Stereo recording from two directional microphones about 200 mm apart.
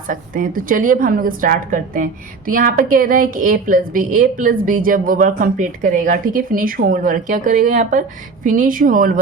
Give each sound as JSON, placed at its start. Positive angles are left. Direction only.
{"t": 0.1, "sound": "a woman's voice", "side_deg": -40}